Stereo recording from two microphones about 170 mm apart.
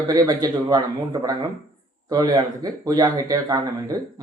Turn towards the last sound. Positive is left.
turn(degrees=-20)  # may be behind; listen again after turning